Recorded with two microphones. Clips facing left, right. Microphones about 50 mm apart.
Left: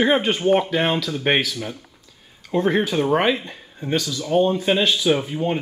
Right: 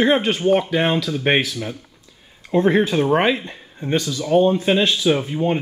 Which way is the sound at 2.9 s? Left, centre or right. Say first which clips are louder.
Right 2 dB; centre.